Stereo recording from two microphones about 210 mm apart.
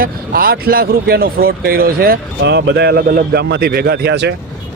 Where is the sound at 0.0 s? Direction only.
45° right (ahead or behind).